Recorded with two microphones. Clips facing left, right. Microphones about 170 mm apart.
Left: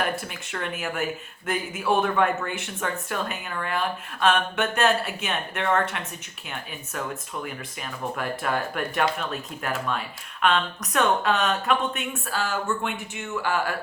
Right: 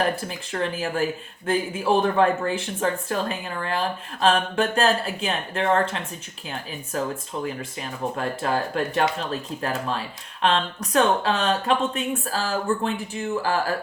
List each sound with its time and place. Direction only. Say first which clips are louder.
0.0 s speech: right 3 dB; 30° right (ahead or behind)
7.4 s speech: right 5 dB; 30° right (ahead or behind)